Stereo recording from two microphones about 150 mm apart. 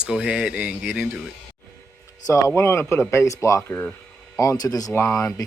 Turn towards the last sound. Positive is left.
turn(degrees=20)  # may be behind; listen again after turning